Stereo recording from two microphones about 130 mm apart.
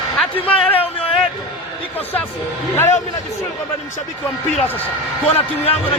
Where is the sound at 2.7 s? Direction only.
20° left (ahead or behind).